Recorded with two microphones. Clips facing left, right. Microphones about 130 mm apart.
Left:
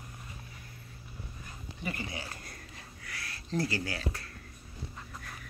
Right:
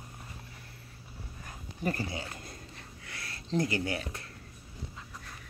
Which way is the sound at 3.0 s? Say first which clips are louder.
Left 1 dB; 25° right (ahead or behind).